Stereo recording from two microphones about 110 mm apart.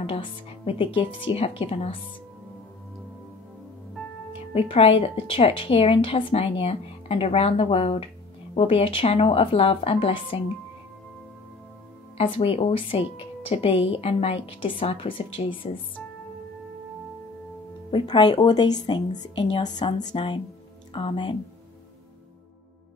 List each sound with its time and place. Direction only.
0.0 s speech: 55° left (ahead or behind)
1.3 s speech: 60° left (ahead or behind)
4.3 s speech: 60° left (ahead or behind)
12.2 s speech: 60° left (ahead or behind)
18.0 s speech: 40° left (ahead or behind)